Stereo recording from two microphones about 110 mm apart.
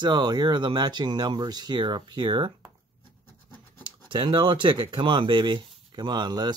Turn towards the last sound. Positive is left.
turn(degrees=-40)  # may be behind; listen again after turning